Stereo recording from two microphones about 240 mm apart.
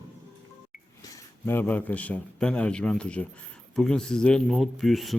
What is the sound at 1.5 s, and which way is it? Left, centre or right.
Speech, centre.